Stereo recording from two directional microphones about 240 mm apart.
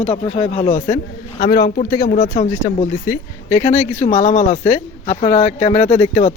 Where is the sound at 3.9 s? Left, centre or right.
Left.